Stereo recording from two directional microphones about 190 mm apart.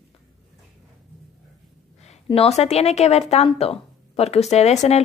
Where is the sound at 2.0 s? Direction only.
35° left (ahead or behind).